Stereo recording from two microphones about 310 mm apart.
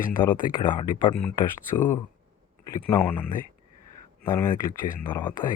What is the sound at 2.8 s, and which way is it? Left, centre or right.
Speech, centre.